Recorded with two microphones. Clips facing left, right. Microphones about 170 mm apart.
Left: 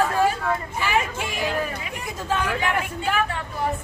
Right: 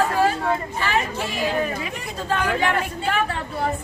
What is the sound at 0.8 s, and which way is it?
Speech, 10° left (ahead or behind).